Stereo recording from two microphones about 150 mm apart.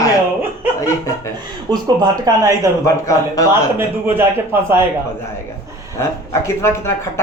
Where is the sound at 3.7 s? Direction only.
15° right (ahead or behind).